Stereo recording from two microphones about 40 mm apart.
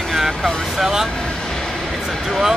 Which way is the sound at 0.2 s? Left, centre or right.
Centre.